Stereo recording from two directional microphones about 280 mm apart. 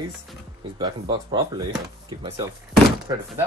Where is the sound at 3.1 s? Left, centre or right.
Centre.